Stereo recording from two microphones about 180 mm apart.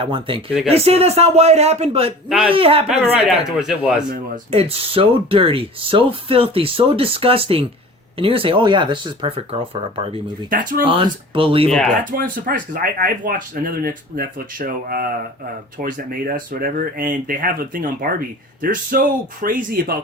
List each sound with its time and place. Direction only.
0.0 s speech: 30° right (ahead or behind)
3.6 s a man's voice: 5° right (ahead or behind)
4.5 s speech: 35° right (ahead or behind)
10.5 s speech: 50° right (ahead or behind)
10.8 s speech: 30° right (ahead or behind)
12.1 s speech: 50° right (ahead or behind)